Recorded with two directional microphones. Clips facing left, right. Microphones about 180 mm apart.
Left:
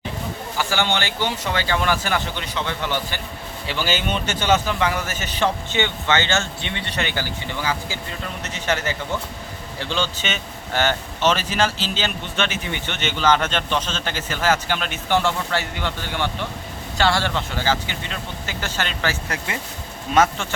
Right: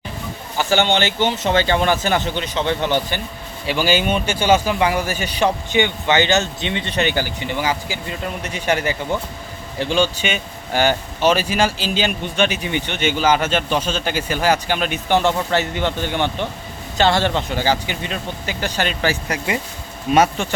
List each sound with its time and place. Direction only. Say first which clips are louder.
0.6 s speech: right 6 dB; 20° right (ahead or behind)